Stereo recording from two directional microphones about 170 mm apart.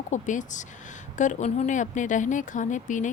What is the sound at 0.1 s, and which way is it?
Speech, 45° left (ahead or behind).